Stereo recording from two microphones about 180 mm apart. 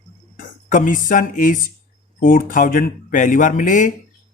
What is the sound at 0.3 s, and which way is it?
Speech, 45° left (ahead or behind).